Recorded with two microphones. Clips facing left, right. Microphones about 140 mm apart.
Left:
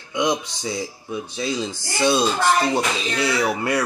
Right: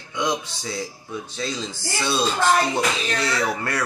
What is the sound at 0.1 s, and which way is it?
Speech, 15° left (ahead or behind).